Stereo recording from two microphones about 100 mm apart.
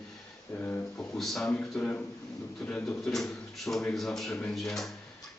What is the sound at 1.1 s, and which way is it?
Speech, 5° left (ahead or behind).